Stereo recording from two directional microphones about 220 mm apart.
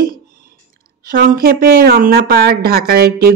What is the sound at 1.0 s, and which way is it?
Speech, 40° right (ahead or behind).